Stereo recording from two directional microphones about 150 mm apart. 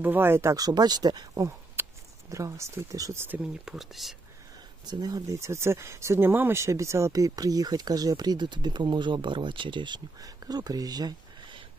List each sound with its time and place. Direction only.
0.0 s speech: 15° right (ahead or behind)
3.6 s speech: centre (ahead or behind)
4.8 s speech: 25° right (ahead or behind)